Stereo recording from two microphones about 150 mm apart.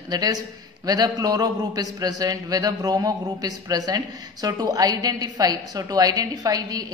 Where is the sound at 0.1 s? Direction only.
25° right (ahead or behind).